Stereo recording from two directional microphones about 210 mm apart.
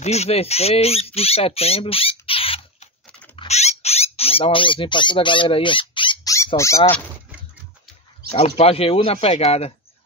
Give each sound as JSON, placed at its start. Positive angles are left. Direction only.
{"t": 0.0, "sound": "speech", "side_deg": 30}
{"t": 3.3, "sound": "a sound", "side_deg": 30}
{"t": 8.3, "sound": "speech", "side_deg": 30}